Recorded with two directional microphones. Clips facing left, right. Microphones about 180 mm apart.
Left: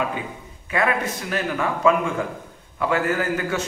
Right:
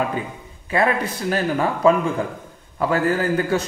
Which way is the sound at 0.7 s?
30° right (ahead or behind).